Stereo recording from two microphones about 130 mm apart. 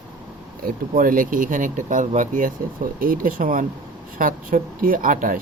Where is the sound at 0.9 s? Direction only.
90° right.